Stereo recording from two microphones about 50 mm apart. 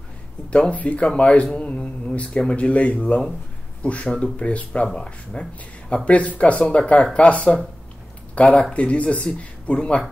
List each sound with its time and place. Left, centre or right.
0.5 s speech: left
6.0 s speech: left